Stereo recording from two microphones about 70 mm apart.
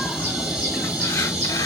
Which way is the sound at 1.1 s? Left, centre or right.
Left.